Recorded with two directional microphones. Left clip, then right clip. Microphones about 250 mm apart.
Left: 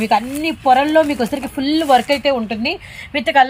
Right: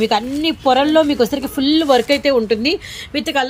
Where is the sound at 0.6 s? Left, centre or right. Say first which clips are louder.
Left 1 dB; centre.